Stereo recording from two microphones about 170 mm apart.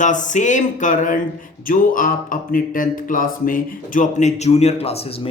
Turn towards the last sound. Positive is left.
turn(degrees=35)  # may be behind; listen again after turning